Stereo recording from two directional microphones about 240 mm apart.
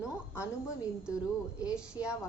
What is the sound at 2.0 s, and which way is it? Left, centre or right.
Speech, centre.